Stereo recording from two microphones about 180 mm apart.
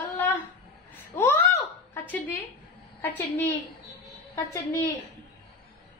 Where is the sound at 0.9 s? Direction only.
10° left (ahead or behind).